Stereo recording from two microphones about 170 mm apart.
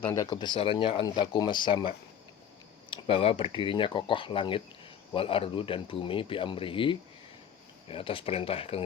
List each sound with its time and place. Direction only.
0.1 s speech: 25° left (ahead or behind)